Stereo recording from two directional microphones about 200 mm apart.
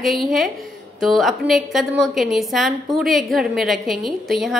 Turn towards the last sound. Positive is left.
turn(degrees=0)  # may be behind; listen again after turning